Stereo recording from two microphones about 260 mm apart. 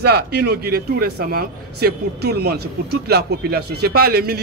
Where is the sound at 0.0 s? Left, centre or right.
Right.